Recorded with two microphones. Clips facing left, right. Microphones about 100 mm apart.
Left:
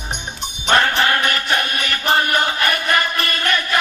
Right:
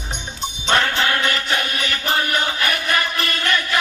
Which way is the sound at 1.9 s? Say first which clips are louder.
Left 5 dB; 40° left (ahead or behind).